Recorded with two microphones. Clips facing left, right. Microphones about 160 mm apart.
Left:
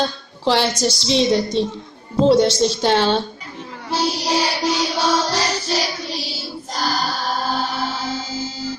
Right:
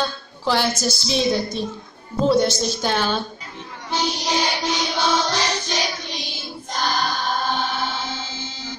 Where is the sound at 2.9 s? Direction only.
30° left (ahead or behind).